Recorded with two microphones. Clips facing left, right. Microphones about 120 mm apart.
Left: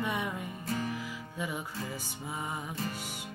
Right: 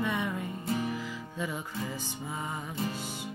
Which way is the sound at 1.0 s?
10° left (ahead or behind).